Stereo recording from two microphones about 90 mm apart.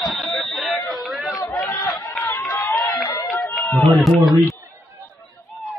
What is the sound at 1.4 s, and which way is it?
Chatter, 25° left (ahead or behind).